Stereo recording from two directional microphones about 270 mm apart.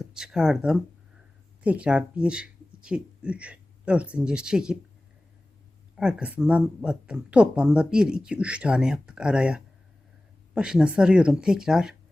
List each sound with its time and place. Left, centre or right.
0.0 s speech: centre
6.0 s speech: centre